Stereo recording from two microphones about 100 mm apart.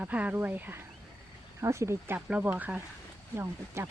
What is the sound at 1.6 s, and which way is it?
Speech, 30° right (ahead or behind).